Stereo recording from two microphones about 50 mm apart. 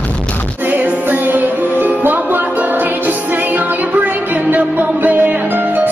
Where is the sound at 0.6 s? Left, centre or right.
Right.